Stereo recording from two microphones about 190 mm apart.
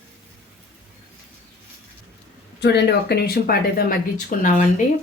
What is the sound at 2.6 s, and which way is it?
Speech, 60° left (ahead or behind).